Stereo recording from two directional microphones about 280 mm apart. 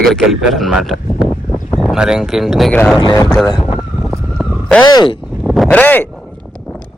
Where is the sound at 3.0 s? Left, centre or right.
Centre.